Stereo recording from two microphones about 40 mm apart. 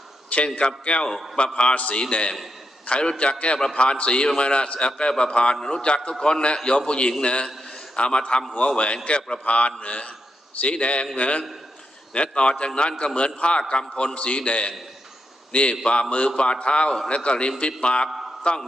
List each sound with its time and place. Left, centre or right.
0.3 s a man's voice: left
15.7 s a man's voice: left